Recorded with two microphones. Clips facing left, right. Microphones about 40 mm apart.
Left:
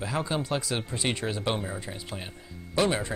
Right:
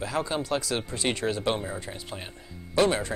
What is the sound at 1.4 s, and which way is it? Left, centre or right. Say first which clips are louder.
Speech: right 2 dB; centre.